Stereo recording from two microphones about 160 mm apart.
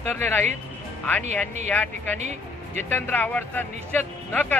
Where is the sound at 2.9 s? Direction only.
10° left (ahead or behind).